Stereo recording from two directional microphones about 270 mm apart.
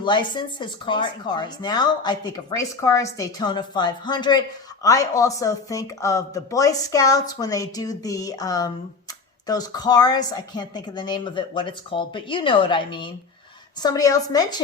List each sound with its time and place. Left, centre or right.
0.0 s speech: centre